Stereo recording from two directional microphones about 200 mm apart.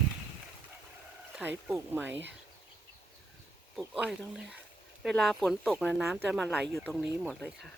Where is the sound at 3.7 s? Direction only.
Centre (ahead or behind).